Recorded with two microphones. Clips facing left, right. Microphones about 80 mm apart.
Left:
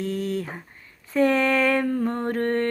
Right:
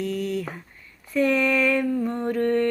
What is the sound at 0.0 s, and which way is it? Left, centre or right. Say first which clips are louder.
Speech: even; left.